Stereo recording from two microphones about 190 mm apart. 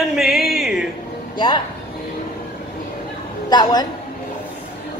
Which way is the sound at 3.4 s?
20° left (ahead or behind).